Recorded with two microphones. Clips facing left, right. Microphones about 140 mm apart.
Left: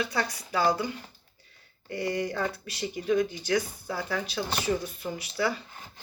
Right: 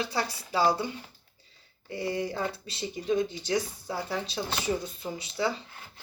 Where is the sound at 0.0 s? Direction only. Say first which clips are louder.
Left 1 dB; 30° right (ahead or behind).